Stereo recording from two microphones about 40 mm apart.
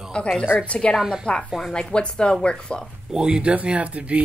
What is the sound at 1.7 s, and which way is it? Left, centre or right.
A woman's voice, left.